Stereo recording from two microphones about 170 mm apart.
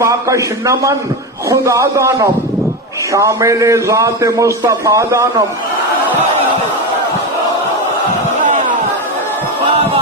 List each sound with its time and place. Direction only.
0.0 s a man's voice: 20° right (ahead or behind)